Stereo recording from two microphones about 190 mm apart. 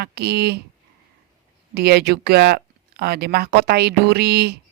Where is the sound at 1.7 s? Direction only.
60° right (ahead or behind).